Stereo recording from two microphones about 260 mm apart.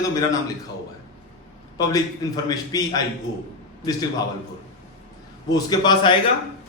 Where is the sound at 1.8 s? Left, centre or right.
Centre.